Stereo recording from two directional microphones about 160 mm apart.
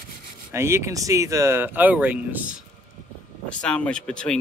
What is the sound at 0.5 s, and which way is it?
Speech, 15° right (ahead or behind).